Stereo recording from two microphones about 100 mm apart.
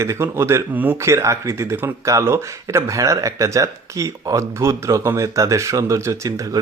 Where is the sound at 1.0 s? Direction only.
30° right (ahead or behind).